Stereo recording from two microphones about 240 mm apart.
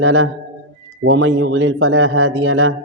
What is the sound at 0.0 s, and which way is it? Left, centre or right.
A man's voice, right.